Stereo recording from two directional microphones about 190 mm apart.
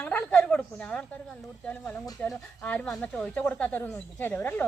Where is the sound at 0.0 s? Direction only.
5° left (ahead or behind).